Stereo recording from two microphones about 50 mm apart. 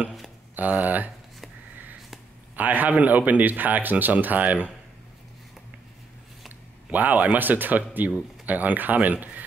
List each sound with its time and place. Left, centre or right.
0.6 s a man's voice: right
2.5 s a man's voice: right
6.9 s a man's voice: right